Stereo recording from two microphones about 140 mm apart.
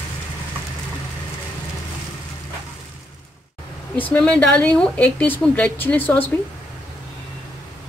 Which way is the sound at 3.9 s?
10° left (ahead or behind).